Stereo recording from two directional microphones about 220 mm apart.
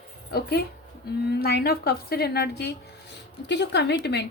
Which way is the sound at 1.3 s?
45° left (ahead or behind).